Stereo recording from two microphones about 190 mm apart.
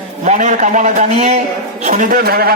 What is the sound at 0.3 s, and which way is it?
A man's voice, 40° right (ahead or behind).